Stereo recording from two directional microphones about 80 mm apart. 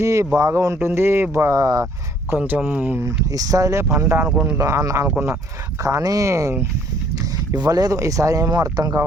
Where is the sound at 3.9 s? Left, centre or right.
Right.